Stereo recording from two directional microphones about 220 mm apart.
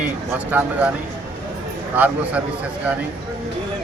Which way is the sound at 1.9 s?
5° right (ahead or behind).